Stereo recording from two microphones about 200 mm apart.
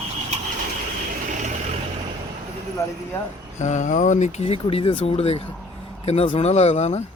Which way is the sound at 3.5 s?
35° left (ahead or behind).